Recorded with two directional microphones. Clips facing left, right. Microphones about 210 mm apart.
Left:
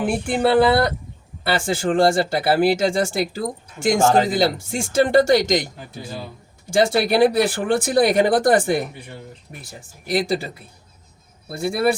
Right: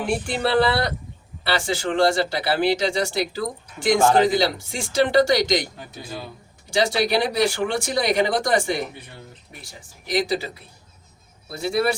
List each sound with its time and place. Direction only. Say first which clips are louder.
0.3 s speech: left 5 dB; 50° left (ahead or behind)
6.7 s speech: left 4 dB; 50° left (ahead or behind)
10.1 s speech: left 2 dB; 50° left (ahead or behind)
11.6 s speech: even; 50° left (ahead or behind)